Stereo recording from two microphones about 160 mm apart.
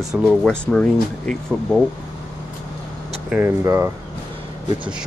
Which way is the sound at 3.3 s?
15° right (ahead or behind).